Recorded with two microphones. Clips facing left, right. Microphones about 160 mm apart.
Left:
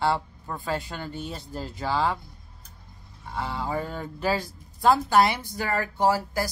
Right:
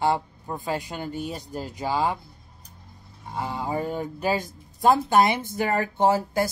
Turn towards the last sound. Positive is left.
turn(degrees=-20)  # may be behind; listen again after turning